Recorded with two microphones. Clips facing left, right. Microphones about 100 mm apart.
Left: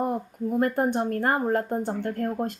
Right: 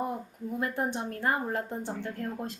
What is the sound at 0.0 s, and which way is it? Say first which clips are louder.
Speech: left 7 dB; 55° left (ahead or behind).